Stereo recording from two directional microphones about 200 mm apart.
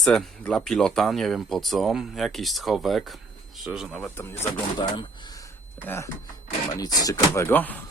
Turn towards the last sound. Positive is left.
turn(degrees=10)  # may be behind; listen again after turning